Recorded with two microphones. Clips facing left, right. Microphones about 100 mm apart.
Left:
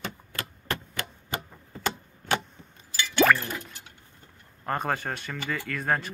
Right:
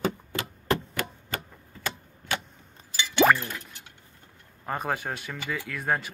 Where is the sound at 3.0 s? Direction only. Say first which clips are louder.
Right 1 dB; 20° right (ahead or behind).